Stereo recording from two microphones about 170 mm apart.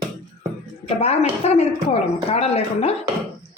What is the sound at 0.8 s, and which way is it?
A woman's voice, 40° left (ahead or behind).